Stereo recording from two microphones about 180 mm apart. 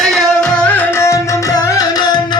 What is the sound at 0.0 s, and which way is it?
Music, centre (ahead or behind).